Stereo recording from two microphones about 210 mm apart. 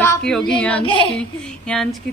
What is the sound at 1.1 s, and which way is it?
Speech, 5° left (ahead or behind).